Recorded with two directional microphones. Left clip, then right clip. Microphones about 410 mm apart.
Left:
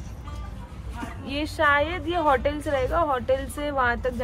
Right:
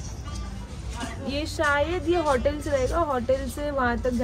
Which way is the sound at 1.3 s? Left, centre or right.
Centre.